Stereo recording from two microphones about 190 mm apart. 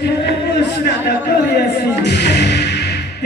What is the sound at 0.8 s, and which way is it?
Speech, 60° left (ahead or behind).